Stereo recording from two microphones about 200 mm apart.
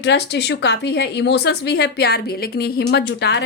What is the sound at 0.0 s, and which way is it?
Speech, 60° left (ahead or behind).